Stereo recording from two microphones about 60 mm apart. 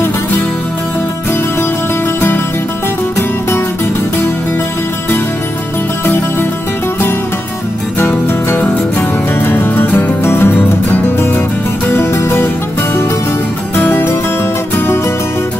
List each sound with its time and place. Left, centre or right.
8.0 s music: left
13.7 s music: left